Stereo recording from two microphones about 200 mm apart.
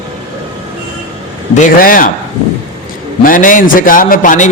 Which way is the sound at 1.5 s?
45° left (ahead or behind).